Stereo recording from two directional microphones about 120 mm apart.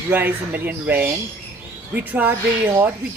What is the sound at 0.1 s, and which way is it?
Speech, 15° right (ahead or behind).